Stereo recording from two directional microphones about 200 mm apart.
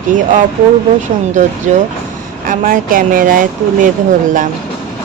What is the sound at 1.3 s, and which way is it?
Speech, 40° right (ahead or behind).